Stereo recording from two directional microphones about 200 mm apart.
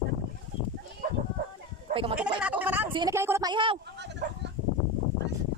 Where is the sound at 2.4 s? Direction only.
10° right (ahead or behind).